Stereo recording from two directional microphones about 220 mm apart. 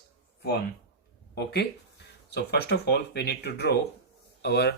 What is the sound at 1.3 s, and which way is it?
Speech, 50° left (ahead or behind).